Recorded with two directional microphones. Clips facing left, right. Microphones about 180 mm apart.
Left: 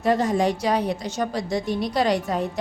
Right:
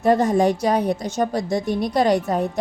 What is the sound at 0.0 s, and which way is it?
A woman's voice, 50° right (ahead or behind).